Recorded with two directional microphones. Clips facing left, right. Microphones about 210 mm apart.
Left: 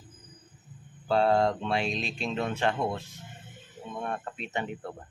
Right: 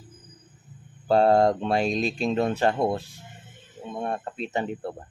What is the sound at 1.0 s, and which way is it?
Speech, 40° right (ahead or behind).